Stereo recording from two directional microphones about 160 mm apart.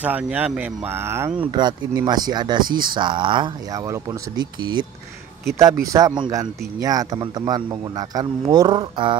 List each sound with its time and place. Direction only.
0.0 s speech: 10° right (ahead or behind)
1.5 s speech: 25° right (ahead or behind)